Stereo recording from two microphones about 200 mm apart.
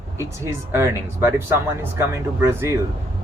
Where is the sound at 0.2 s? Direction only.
15° right (ahead or behind).